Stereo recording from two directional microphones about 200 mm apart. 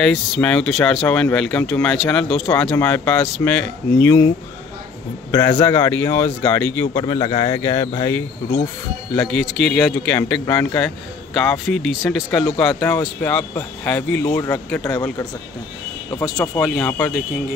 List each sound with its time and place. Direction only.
0.0 s speech: 5° left (ahead or behind)
5.3 s a man's voice: 20° left (ahead or behind)
9.1 s speech: 5° left (ahead or behind)
16.3 s speech: 10° left (ahead or behind)